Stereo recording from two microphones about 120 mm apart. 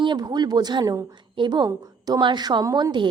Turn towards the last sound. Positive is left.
turn(degrees=-40)  # may be behind; listen again after turning